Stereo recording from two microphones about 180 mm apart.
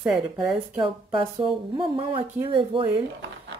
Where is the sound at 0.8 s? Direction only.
30° right (ahead or behind).